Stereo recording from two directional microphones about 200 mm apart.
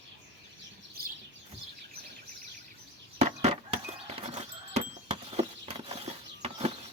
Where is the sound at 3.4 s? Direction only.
30° right (ahead or behind).